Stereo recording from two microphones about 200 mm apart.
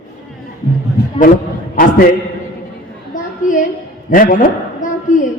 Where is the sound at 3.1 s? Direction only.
40° left (ahead or behind).